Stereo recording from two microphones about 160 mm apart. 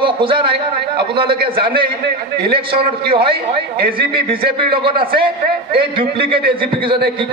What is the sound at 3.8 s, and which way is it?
Speech, 65° right (ahead or behind).